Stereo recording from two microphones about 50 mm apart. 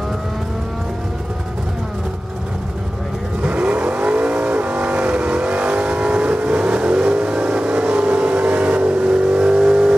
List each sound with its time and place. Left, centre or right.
3.4 s vehicle: right